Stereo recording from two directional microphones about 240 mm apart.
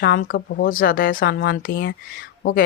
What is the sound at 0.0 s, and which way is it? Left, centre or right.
Speech, left.